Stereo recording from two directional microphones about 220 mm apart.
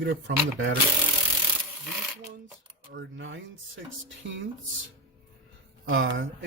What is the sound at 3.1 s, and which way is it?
Speech, 55° right (ahead or behind).